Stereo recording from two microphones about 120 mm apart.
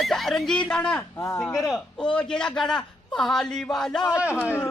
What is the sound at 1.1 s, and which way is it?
Speech, 20° left (ahead or behind).